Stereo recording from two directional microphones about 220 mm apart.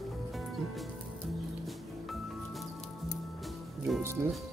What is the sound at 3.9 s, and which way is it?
Music, centre (ahead or behind).